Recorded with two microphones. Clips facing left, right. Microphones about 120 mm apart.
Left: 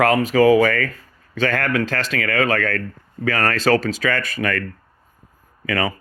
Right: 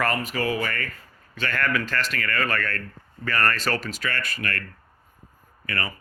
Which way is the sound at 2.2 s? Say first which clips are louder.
Left 10 dB; 90° left.